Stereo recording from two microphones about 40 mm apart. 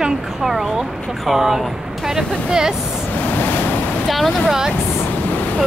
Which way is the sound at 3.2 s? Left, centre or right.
Left.